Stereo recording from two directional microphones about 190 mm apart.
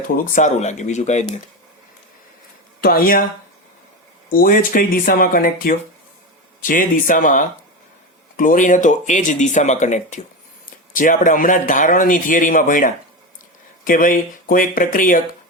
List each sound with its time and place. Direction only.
0.3 s speech: 40° left (ahead or behind)
2.8 s speech: 50° left (ahead or behind)
4.3 s speech: 50° left (ahead or behind)